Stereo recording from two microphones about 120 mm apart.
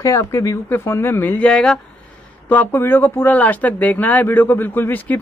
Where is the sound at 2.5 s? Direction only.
15° left (ahead or behind).